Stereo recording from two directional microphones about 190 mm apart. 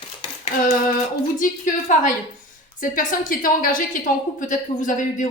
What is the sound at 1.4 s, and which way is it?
A woman's voice, 45° left (ahead or behind).